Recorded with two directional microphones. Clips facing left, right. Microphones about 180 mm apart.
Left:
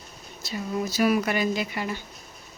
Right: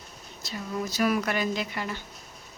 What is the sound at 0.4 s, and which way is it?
Speech, 10° left (ahead or behind).